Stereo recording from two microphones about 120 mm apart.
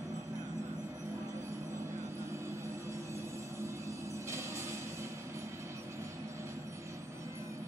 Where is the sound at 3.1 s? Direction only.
25° right (ahead or behind).